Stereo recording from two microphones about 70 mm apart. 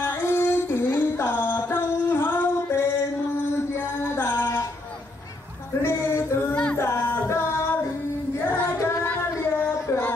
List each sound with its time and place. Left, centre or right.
0.0 s music: left
3.5 s a sound: left
6.5 s a sound: centre
6.8 s music: left
8.6 s child singing: left
9.0 s child singing: left
9.8 s music: left